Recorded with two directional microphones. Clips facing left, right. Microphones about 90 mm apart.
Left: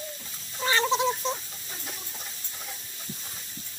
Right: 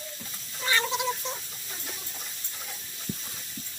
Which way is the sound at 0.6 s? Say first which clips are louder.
Left 4 dB; 30° left (ahead or behind).